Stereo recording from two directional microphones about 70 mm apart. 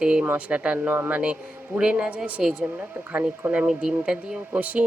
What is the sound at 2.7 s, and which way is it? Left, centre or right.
Speech, right.